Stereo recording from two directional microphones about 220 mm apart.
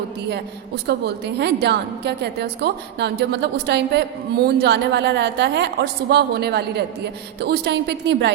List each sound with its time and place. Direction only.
0.9 s a woman's voice: 50° right (ahead or behind)